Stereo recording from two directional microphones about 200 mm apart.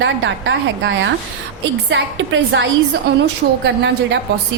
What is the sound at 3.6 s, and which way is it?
Speech, 60° right (ahead or behind).